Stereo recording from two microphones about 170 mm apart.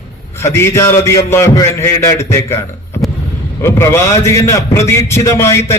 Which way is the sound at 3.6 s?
15° left (ahead or behind).